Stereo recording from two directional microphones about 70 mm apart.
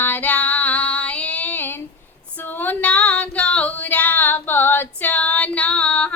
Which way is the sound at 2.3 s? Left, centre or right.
Left.